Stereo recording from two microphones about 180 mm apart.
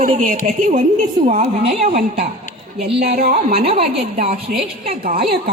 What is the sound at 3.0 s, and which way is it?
Speech, 55° right (ahead or behind).